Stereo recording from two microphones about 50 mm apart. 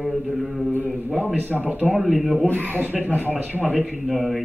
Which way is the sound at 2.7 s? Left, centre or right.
Right.